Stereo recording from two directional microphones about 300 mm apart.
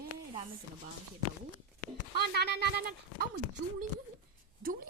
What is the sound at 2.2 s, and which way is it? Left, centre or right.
Speech, right.